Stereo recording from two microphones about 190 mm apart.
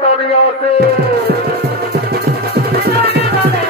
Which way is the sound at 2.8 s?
60° right (ahead or behind).